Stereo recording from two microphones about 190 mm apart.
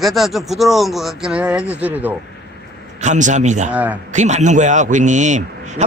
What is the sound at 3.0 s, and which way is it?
Speech, 40° right (ahead or behind).